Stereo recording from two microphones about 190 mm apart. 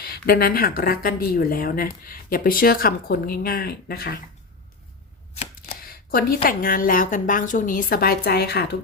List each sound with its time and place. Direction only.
0.0 s speech: 55° left (ahead or behind)
5.8 s speech: 50° left (ahead or behind)